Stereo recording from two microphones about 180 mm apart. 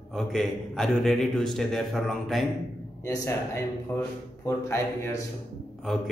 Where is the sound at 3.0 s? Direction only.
15° left (ahead or behind).